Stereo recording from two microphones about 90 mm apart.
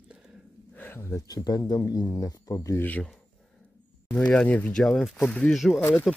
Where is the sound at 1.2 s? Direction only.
45° left (ahead or behind).